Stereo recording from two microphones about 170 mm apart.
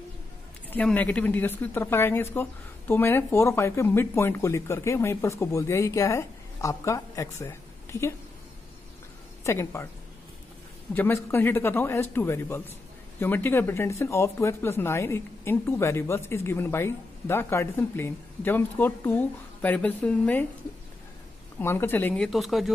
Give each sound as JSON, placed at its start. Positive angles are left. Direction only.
{"t": 0.7, "sound": "speech", "side_deg": 10}
{"t": 9.4, "sound": "speech", "side_deg": 15}
{"t": 11.0, "sound": "speech", "side_deg": 10}
{"t": 21.5, "sound": "speech", "side_deg": 10}